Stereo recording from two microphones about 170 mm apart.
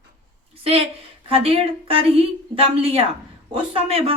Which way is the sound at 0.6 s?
35° right (ahead or behind).